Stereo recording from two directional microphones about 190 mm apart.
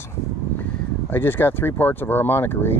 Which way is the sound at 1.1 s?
10° left (ahead or behind).